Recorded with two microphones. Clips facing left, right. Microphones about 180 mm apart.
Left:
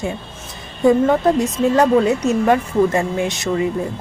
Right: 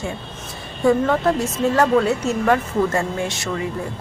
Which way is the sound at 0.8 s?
15° left (ahead or behind).